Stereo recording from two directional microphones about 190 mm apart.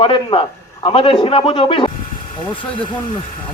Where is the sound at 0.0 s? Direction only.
25° left (ahead or behind).